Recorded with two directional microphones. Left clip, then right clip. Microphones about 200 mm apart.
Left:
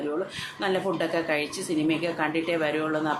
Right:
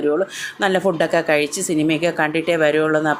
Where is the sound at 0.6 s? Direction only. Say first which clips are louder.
Right 9 dB; 35° right (ahead or behind).